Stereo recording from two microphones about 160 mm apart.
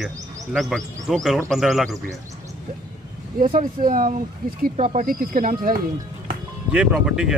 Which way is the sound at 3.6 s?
60° right (ahead or behind).